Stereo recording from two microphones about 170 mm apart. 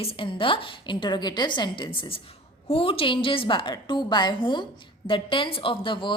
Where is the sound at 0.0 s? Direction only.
35° left (ahead or behind).